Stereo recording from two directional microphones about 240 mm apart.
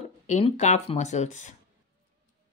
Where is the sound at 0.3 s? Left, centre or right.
Left.